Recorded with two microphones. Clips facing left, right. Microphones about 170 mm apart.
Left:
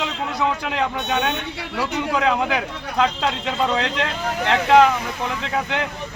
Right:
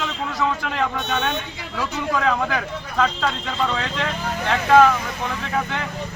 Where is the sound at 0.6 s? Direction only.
15° left (ahead or behind).